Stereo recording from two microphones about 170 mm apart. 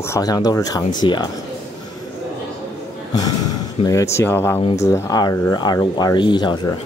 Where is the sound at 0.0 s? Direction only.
20° left (ahead or behind).